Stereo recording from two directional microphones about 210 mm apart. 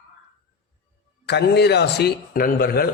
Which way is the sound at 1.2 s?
50° left (ahead or behind).